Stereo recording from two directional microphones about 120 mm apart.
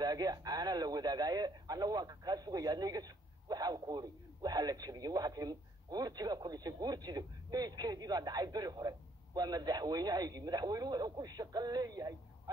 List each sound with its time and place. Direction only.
0.0 s speech: 35° right (ahead or behind)